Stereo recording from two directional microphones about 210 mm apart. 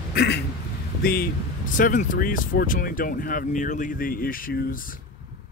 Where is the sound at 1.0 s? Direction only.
45° left (ahead or behind).